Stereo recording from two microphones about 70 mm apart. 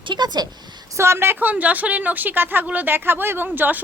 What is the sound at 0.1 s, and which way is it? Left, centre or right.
Speech, right.